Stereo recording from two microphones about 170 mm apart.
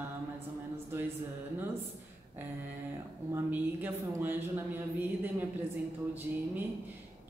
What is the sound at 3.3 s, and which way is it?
A woman's voice, 10° right (ahead or behind).